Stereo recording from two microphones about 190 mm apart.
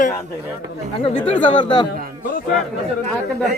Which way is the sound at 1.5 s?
25° left (ahead or behind).